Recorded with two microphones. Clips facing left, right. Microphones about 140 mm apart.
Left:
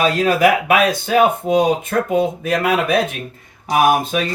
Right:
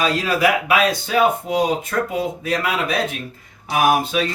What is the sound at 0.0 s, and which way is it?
Speech, 50° left (ahead or behind).